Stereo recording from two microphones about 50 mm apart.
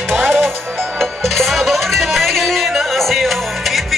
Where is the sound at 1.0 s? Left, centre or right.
Centre.